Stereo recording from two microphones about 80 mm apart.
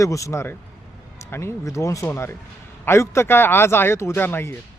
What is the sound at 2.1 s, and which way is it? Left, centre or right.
Speech, left.